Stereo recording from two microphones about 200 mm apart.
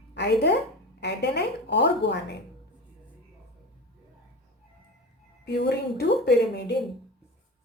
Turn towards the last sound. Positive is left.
turn(degrees=55)  # may be behind; listen again after turning